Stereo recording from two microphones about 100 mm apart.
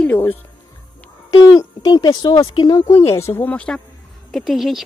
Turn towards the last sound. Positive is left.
turn(degrees=0)  # may be behind; listen again after turning